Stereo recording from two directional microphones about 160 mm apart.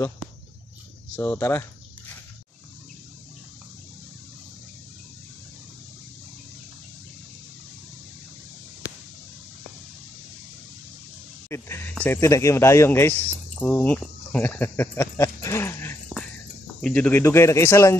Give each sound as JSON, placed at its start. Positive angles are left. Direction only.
{"t": 1.1, "sound": "cricket", "side_deg": 15}
{"t": 11.4, "sound": "a sound", "side_deg": 15}
{"t": 12.0, "sound": "cricket", "side_deg": 15}